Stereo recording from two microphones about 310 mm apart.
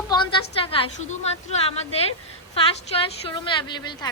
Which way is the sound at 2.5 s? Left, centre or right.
Centre.